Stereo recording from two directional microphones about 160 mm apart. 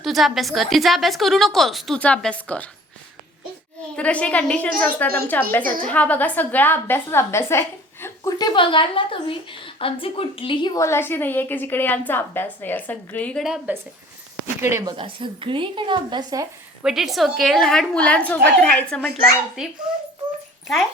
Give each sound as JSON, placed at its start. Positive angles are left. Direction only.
{"t": 0.0, "sound": "a woman's voice", "side_deg": 0}
{"t": 3.9, "sound": "a woman's voice", "side_deg": 10}
{"t": 10.8, "sound": "a woman's voice", "side_deg": 15}
{"t": 14.6, "sound": "speech", "side_deg": -15}
{"t": 14.9, "sound": "speech", "side_deg": -35}
{"t": 16.8, "sound": "a woman's voice", "side_deg": 0}
{"t": 19.9, "sound": "a woman's voice", "side_deg": -5}